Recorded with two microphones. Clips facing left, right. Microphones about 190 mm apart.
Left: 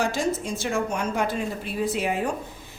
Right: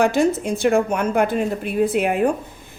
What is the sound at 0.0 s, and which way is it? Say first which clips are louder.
A woman's voice: right 8 dB; 60° right (ahead or behind).